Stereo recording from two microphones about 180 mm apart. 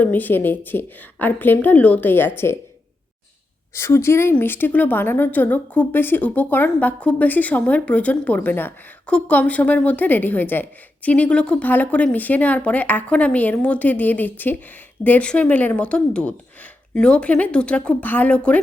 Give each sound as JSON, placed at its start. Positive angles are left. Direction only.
{"t": 0.0, "sound": "a woman's voice", "side_deg": 10}
{"t": 3.8, "sound": "a woman's voice", "side_deg": 15}